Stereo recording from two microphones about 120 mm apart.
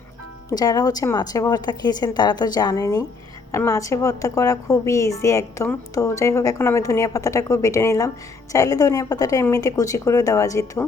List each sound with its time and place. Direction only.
0.5 s a woman's voice: 30° left (ahead or behind)